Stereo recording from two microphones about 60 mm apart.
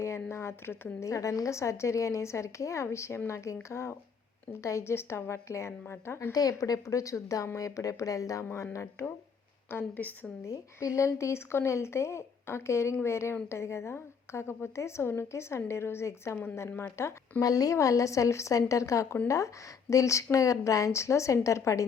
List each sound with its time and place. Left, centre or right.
0.0 s a woman's voice: left
0.9 s a woman's voice: left
6.3 s a woman's voice: left
8.4 s a woman's voice: left
9.6 s speech: left
10.4 s a woman's voice: left
17.4 s a woman's voice: left